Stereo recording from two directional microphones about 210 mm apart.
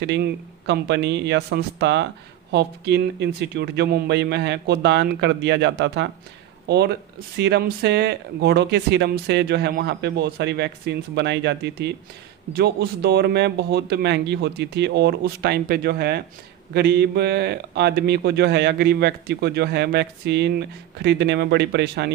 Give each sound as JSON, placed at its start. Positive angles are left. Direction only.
{"t": 0.0, "sound": "a man's voice", "side_deg": -55}